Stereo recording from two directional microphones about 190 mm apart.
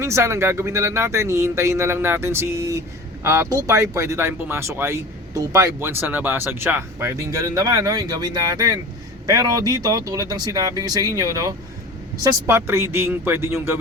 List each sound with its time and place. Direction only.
0.0 s speech: 15° right (ahead or behind)